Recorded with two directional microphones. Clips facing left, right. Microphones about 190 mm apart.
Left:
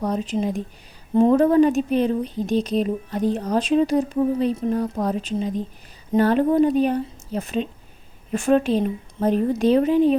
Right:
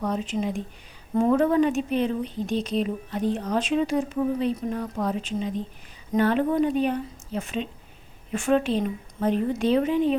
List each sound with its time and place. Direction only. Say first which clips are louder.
0.0 s speech: left 3 dB; 35° left (ahead or behind)